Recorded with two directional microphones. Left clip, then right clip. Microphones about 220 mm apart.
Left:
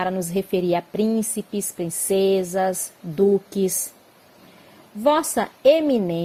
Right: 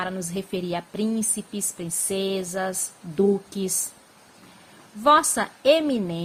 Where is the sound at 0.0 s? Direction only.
20° left (ahead or behind).